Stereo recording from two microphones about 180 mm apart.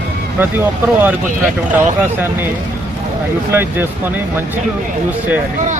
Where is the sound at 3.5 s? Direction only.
10° right (ahead or behind).